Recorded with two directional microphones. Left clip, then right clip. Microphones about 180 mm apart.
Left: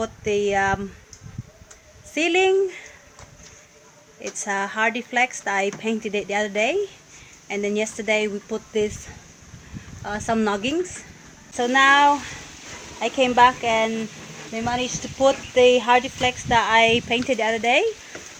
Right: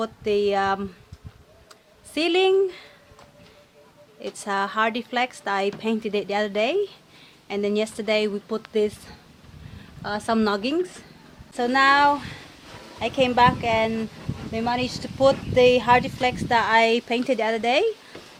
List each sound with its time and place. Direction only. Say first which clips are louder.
0.0 s speech: even; 10° right (ahead or behind)
2.1 s speech: left 1 dB; 10° right (ahead or behind)
4.2 s speech: even; 10° right (ahead or behind)
10.0 s speech: even; 15° right (ahead or behind)
11.5 s a woman's voice: left 2 dB; centre (ahead or behind)